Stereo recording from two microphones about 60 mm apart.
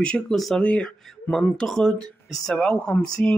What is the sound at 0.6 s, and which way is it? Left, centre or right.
Speech, centre.